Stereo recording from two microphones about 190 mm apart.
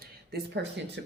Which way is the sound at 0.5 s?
65° right (ahead or behind).